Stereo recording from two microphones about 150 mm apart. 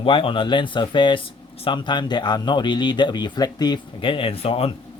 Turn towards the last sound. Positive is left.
turn(degrees=40)  # may be behind; listen again after turning